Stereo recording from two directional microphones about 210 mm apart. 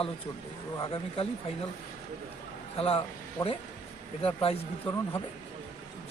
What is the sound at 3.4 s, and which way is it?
Speech, 10° left (ahead or behind).